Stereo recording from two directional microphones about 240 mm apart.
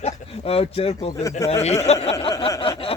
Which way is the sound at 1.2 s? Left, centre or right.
Centre.